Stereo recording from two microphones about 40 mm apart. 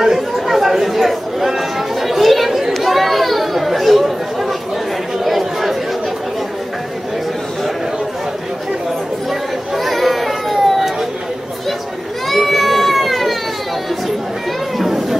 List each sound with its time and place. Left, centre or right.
0.0 s chatter: centre
9.3 s chatter: centre
12.3 s baby cry: centre
14.8 s a sound: centre